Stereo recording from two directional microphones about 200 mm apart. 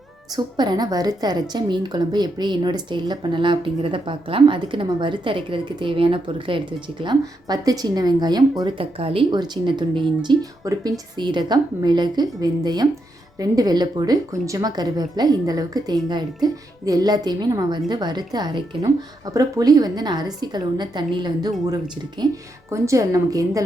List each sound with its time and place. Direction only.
0.3 s a woman's voice: 20° right (ahead or behind)
22.7 s a woman's voice: 15° right (ahead or behind)